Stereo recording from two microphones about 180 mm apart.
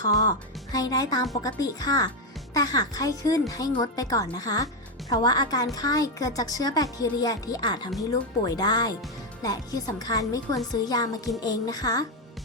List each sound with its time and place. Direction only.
0.0 s a woman's voice: 20° left (ahead or behind)